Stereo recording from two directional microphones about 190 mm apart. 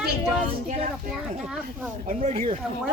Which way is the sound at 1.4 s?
Centre (ahead or behind).